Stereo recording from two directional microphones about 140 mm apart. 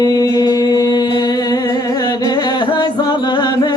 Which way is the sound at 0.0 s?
25° left (ahead or behind).